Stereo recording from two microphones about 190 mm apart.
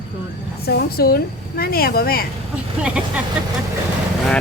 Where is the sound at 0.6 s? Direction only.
55° left (ahead or behind).